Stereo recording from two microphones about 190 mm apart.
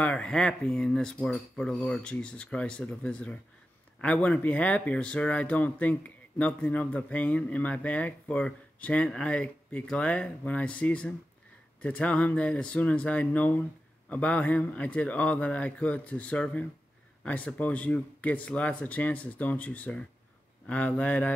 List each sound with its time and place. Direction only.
0.0 s speech: 5° left (ahead or behind)